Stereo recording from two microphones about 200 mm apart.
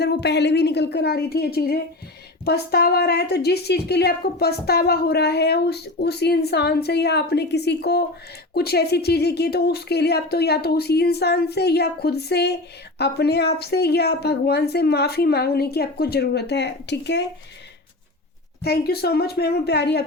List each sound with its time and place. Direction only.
0.0 s a woman's voice: 55° left (ahead or behind)
18.6 s a woman's voice: 50° left (ahead or behind)